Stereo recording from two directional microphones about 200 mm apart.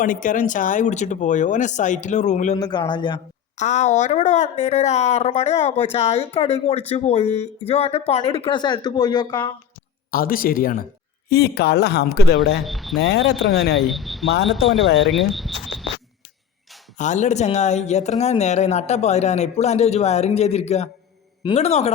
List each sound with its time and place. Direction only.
0.0 s speech: 40° left (ahead or behind)
2.6 s speech: 20° left (ahead or behind)
3.6 s speech: 35° left (ahead or behind); by 9.5 s 20° left (ahead or behind)
10.1 s a woman's voice: 45° left (ahead or behind)
12.6 s speech: centre (ahead or behind)
13.0 s a woman's voice: 55° left (ahead or behind)
13.7 s speech: centre (ahead or behind)
17.0 s speech: 35° left (ahead or behind)